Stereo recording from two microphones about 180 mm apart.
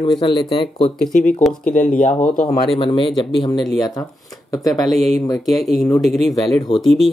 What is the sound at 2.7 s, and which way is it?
Speech, 30° left (ahead or behind).